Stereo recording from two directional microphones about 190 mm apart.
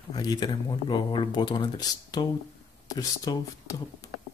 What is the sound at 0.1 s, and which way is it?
Speech, 20° left (ahead or behind).